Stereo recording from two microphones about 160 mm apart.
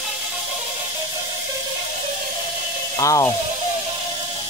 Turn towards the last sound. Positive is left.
turn(degrees=20)  # may be behind; listen again after turning